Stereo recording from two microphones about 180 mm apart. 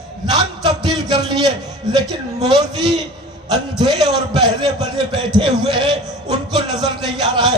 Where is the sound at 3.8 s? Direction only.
25° right (ahead or behind).